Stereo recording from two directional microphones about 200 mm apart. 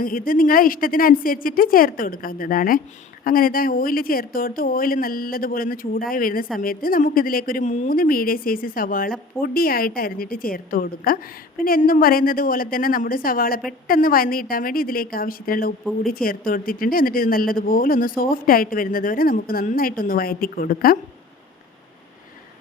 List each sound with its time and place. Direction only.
0.0 s speech: 45° left (ahead or behind)